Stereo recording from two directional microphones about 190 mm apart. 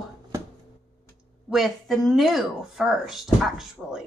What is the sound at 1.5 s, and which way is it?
Speech, centre (ahead or behind).